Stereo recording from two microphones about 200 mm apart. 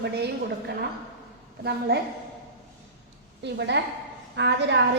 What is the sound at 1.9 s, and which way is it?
Speech, 55° right (ahead or behind).